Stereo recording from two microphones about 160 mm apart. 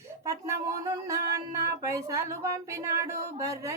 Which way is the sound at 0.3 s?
20° right (ahead or behind).